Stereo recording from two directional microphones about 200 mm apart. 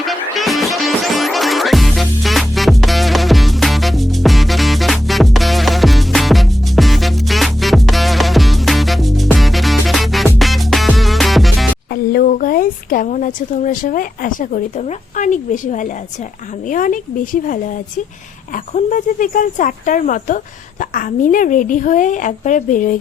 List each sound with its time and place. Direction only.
0.0 s music: centre (ahead or behind)
12.1 s speech: 45° left (ahead or behind)